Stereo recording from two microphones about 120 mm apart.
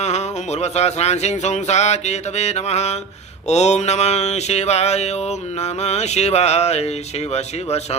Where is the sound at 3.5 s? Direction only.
70° left (ahead or behind).